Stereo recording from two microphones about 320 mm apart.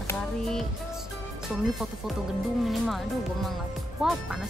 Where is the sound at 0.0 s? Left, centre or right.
Centre.